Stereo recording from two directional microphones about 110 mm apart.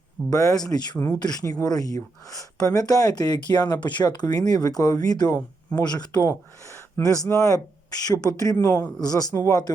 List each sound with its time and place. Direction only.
0.3 s speech: 30° left (ahead or behind)
8.5 s speech: 25° left (ahead or behind)